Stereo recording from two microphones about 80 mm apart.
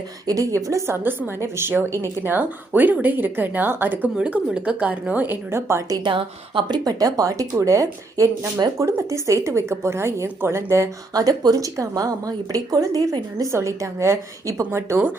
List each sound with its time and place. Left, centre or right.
0.3 s a woman's voice: right
4.2 s a woman's voice: centre; by 5.8 s right
6.1 s speech: right
6.8 s a woman's voice: right
11.1 s a woman's voice: right
13.4 s a woman's voice: right